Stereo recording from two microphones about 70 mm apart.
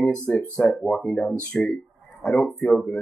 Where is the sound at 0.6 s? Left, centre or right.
Centre.